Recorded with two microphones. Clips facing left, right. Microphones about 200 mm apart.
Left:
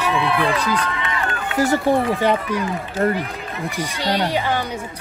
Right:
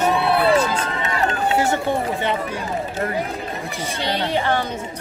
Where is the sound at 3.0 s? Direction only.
45° left (ahead or behind).